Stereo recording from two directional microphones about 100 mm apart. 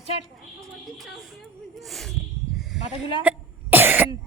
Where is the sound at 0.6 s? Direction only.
Centre (ahead or behind).